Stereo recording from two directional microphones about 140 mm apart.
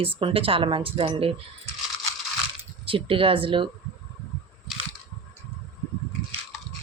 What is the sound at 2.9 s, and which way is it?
Speech, 40° right (ahead or behind).